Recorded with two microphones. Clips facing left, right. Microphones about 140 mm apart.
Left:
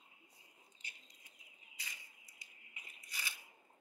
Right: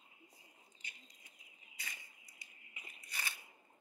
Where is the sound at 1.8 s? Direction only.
55° right (ahead or behind).